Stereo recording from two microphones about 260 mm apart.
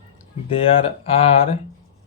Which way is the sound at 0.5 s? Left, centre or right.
Left.